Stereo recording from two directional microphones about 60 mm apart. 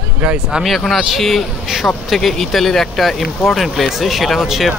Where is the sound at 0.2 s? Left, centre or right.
Centre.